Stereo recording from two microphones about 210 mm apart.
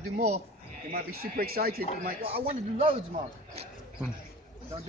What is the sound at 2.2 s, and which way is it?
Speech, 25° right (ahead or behind).